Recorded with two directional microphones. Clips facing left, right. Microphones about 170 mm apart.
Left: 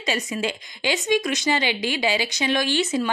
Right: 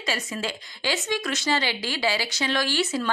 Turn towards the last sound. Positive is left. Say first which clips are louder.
# left 3 dB
turn(degrees=20)  # may be behind; listen again after turning